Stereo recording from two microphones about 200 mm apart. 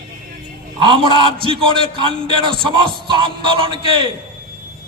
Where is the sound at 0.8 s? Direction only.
25° right (ahead or behind).